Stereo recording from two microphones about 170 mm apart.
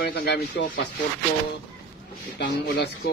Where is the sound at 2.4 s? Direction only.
70° left (ahead or behind).